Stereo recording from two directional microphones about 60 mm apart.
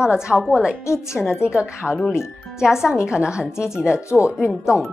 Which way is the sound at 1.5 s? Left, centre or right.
Centre.